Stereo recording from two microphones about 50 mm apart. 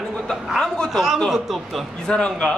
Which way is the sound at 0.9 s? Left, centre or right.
Centre.